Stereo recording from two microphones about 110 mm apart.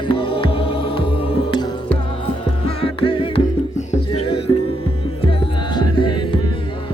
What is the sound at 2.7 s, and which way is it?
Music, 60° left (ahead or behind).